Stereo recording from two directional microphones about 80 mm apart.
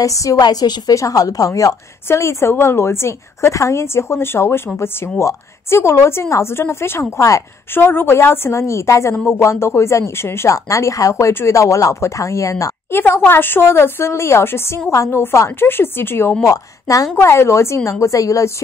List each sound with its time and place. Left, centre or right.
0.0 s a woman's voice: left
0.4 s a woman's voice: left
2.0 s speech: left
7.7 s speech: left
9.1 s a woman's voice: centre
9.4 s speech: left
12.9 s a woman's voice: left
16.4 s a woman's voice: left